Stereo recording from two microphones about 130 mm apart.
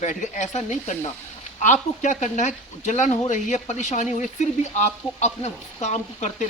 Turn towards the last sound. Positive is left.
turn(degrees=65)  # may be behind; listen again after turning